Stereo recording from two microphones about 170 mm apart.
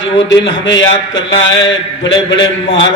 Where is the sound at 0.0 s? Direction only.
90° left.